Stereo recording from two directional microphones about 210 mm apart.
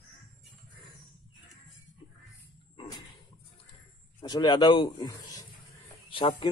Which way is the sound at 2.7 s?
20° left (ahead or behind).